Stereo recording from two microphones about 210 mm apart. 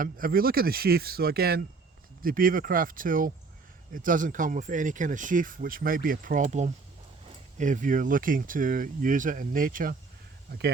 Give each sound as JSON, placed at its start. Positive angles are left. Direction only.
{"t": 0.0, "sound": "speech", "side_deg": -45}